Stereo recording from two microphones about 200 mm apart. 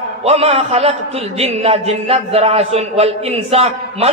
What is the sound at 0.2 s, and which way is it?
A man's voice, 30° right (ahead or behind).